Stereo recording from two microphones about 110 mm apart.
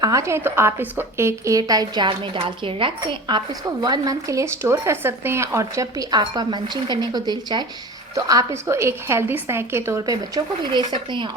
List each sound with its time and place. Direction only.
0.0 s a woman's voice: 30° right (ahead or behind)